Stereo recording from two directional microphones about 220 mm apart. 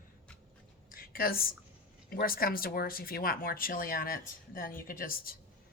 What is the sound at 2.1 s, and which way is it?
Speech, 40° left (ahead or behind).